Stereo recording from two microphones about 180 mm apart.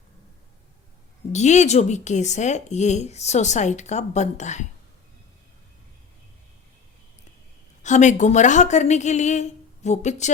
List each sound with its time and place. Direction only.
1.3 s speech: 40° left (ahead or behind)
7.8 s speech: 40° left (ahead or behind)